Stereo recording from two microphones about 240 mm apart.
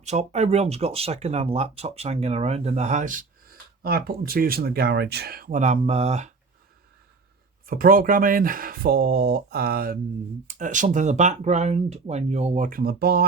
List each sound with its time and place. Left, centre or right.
0.0 s speech: right
7.7 s speech: right